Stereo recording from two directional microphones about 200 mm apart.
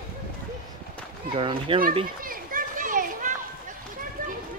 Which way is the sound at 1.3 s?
25° right (ahead or behind).